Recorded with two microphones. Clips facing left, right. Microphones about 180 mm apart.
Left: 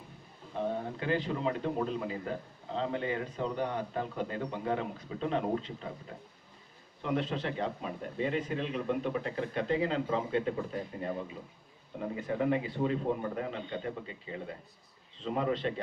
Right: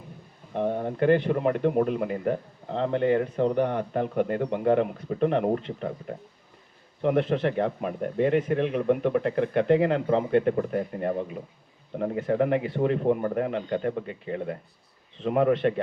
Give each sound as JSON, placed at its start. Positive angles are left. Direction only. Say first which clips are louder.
{"t": 0.5, "sound": "a man's voice", "louder": "right 7 dB", "side_deg": -60}